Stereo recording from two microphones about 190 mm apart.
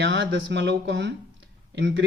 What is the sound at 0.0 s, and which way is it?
Speech, 65° right (ahead or behind).